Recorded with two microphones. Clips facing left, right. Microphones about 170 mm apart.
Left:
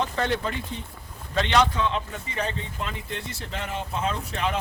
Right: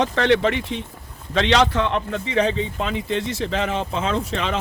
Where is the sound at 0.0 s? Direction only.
80° right.